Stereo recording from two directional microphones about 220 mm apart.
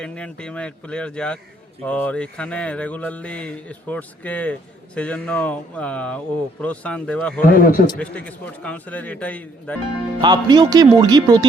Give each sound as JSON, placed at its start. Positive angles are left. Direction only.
{"t": 0.0, "sound": "mantra", "side_deg": 5}
{"t": 7.4, "sound": "a man's voice", "side_deg": 40}
{"t": 7.9, "sound": "a man's voice", "side_deg": 5}
{"t": 10.2, "sound": "speech", "side_deg": -20}